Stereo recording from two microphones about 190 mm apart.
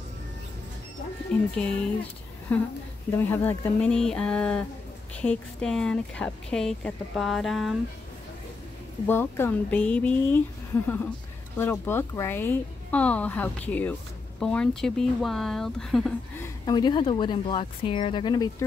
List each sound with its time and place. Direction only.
1.3 s speech: 5° left (ahead or behind)
2.5 s speech: 10° left (ahead or behind)
9.0 s speech: 10° left (ahead or behind)
16.3 s speech: 20° left (ahead or behind)